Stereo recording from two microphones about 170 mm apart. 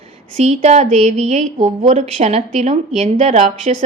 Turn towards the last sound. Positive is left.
turn(degrees=-40)  # may be behind; listen again after turning